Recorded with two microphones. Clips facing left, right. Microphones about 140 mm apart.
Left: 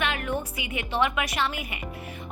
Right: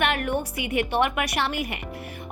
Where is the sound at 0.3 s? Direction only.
65° right (ahead or behind).